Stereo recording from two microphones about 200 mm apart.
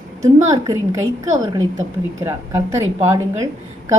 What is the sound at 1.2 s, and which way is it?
A woman's voice, 15° right (ahead or behind).